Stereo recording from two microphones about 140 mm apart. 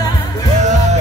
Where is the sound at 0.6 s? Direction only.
55° right (ahead or behind).